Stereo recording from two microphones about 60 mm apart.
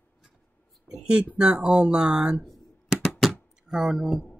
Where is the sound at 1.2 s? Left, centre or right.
Centre.